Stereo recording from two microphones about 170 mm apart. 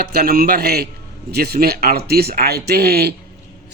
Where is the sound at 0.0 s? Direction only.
65° right (ahead or behind).